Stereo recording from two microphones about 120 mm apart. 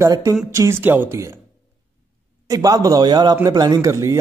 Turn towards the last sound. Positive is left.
turn(degrees=-25)  # may be behind; listen again after turning